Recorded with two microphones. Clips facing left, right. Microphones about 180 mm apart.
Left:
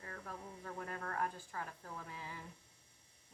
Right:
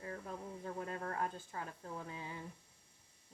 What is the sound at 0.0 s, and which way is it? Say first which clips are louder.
A woman's voice: right 4 dB; 20° right (ahead or behind).